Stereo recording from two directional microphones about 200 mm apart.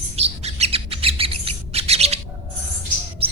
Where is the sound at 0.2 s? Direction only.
30° right (ahead or behind).